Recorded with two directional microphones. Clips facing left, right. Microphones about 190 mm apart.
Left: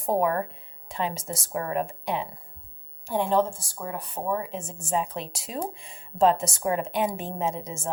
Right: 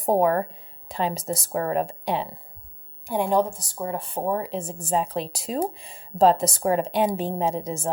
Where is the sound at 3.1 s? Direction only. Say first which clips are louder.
Right 2 dB; 15° right (ahead or behind).